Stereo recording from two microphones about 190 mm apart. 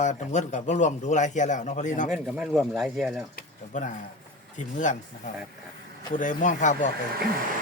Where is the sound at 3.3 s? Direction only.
40° left (ahead or behind).